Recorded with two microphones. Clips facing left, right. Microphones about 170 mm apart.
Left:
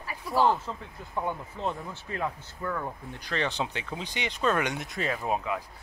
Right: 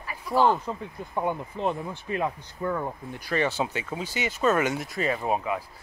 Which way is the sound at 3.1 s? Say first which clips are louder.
Right 4 dB; 10° right (ahead or behind).